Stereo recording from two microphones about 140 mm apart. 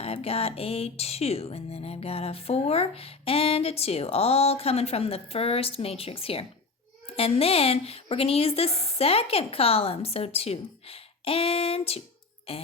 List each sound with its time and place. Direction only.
0.0 s speech: 45° left (ahead or behind)